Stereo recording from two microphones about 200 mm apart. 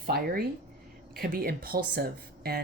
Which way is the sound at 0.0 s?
50° right (ahead or behind).